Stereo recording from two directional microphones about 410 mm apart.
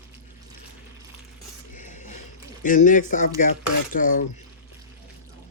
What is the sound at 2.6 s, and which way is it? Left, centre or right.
Speech, centre.